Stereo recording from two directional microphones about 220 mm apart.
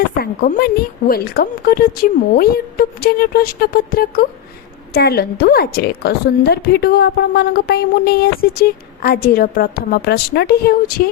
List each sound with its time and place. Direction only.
0.2 s a woman's voice: 40° left (ahead or behind)